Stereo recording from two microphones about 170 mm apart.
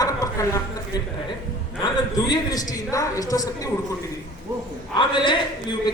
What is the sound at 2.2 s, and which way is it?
Speech, 20° left (ahead or behind).